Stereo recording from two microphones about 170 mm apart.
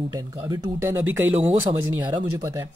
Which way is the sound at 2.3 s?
20° right (ahead or behind).